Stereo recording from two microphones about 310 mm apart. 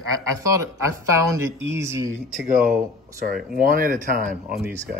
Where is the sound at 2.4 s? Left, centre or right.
Right.